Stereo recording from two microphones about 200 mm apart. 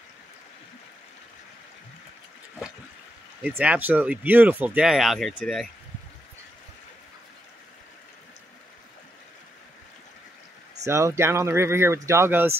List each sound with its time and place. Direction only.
3.4 s speech: 5° right (ahead or behind)
10.9 s speech: 15° right (ahead or behind)